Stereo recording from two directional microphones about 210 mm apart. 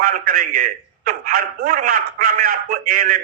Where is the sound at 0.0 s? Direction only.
40° right (ahead or behind).